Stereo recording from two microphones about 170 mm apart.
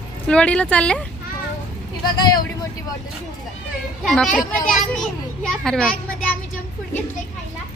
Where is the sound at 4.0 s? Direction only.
5° left (ahead or behind).